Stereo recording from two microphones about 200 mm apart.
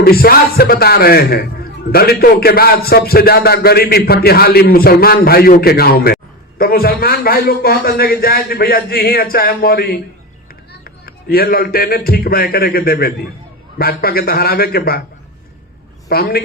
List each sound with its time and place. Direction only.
0.0 s a man's voice: 50° left (ahead or behind)
16.0 s a man's voice: 50° left (ahead or behind)